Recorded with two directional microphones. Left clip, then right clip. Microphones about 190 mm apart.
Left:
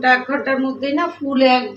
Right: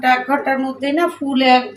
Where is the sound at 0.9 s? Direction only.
55° right (ahead or behind).